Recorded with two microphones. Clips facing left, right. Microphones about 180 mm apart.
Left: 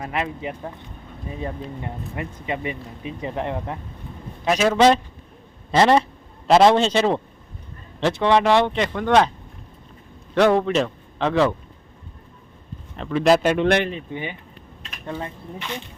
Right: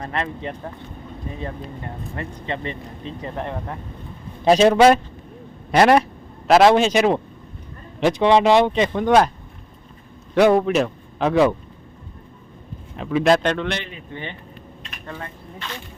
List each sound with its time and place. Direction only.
0.0 s speech: 5° left (ahead or behind)
4.4 s a man's voice: 30° right (ahead or behind)
4.7 s speech: 10° right (ahead or behind)
6.5 s speech: 5° right (ahead or behind)
10.3 s a man's voice: 10° right (ahead or behind)
13.0 s speech: 5° right (ahead or behind)
13.7 s speech: 55° left (ahead or behind)
14.1 s speech: 10° left (ahead or behind)